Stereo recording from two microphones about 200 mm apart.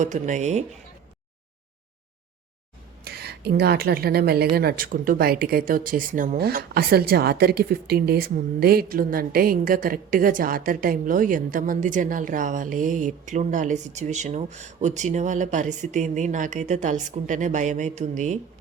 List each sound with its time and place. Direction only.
0.0 s speech: 35° right (ahead or behind)
3.0 s a woman's voice: 50° right (ahead or behind); by 18.3 s 35° right (ahead or behind)